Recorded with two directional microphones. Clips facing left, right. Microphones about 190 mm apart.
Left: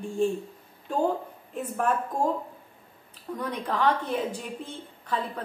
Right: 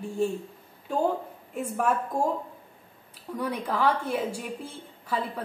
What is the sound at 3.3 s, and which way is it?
A woman's voice, 10° right (ahead or behind).